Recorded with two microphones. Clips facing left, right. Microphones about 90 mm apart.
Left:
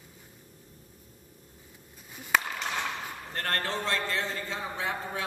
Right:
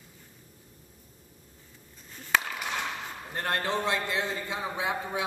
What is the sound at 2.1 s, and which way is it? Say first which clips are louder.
Chop: even; 10° left (ahead or behind).